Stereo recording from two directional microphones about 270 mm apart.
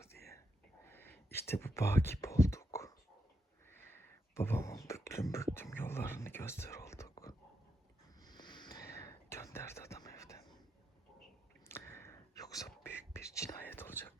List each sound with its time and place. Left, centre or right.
0.9 s whispering: centre
4.4 s speech: centre
8.2 s a sound: centre
8.9 s whispering: centre
11.7 s whispering: centre